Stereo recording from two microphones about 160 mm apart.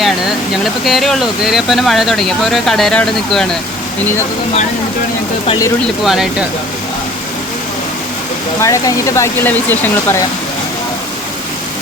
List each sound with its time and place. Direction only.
0.0 s speech: centre (ahead or behind)
6.1 s speech: 5° right (ahead or behind)
8.6 s speech: 20° left (ahead or behind)